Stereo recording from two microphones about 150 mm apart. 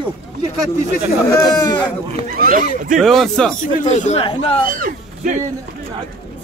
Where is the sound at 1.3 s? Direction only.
25° left (ahead or behind).